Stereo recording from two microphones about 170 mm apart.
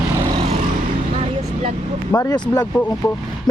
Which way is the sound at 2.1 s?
20° left (ahead or behind).